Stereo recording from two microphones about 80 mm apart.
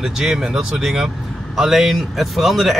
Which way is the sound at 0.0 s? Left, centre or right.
Centre.